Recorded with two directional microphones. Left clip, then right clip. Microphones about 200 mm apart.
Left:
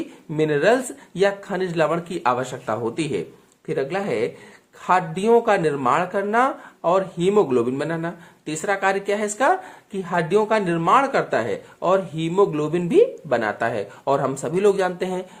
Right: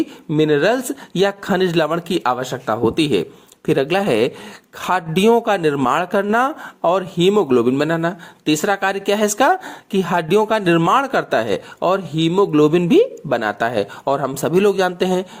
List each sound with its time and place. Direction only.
0.3 s speech: 30° right (ahead or behind)